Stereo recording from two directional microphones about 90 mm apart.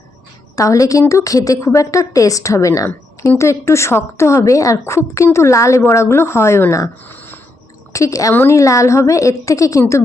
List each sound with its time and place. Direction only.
0.5 s a woman's voice: 35° left (ahead or behind)
7.1 s a sound: 20° left (ahead or behind)
7.9 s a woman's voice: 35° left (ahead or behind)
8.3 s a woman's voice: 20° left (ahead or behind)
8.5 s a woman's voice: 35° left (ahead or behind)